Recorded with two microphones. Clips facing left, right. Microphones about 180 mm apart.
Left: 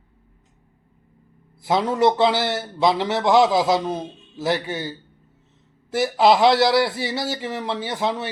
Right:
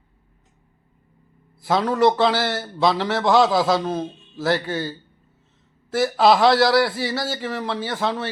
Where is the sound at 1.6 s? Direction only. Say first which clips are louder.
Right 1 dB; 20° left (ahead or behind).